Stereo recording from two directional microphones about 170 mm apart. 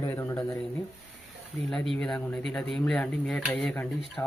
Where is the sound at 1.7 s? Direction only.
Centre (ahead or behind).